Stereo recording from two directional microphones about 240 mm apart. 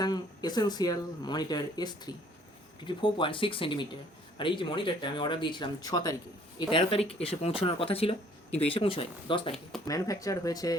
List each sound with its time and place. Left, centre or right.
0.0 s speech: centre